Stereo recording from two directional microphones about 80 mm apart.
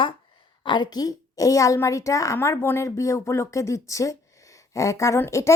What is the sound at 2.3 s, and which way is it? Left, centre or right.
Speech, left.